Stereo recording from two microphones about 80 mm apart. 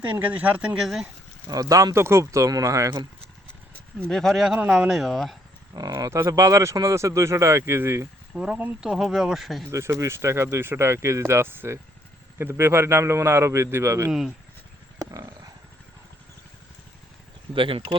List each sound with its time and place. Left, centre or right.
0.2 s speech: centre
0.8 s speech: centre
1.5 s speech: right
4.1 s speech: centre
4.4 s speech: centre
4.9 s speech: centre
5.7 s speech: right
6.1 s speech: right
8.4 s speech: centre
9.6 s speech: right
14.1 s speech: centre
15.1 s wild animals: right
17.5 s speech: right